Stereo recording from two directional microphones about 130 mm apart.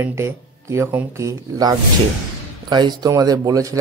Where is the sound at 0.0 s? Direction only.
20° right (ahead or behind).